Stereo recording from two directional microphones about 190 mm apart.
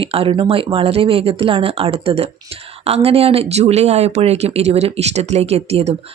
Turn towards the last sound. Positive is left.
turn(degrees=-35)  # may be behind; listen again after turning